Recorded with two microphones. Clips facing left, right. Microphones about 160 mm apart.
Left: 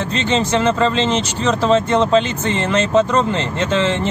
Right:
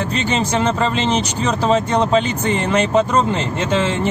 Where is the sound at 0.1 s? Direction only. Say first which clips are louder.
Left 5 dB; 10° right (ahead or behind).